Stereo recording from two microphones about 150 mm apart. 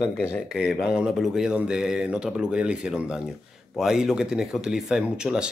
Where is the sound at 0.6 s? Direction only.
Centre (ahead or behind).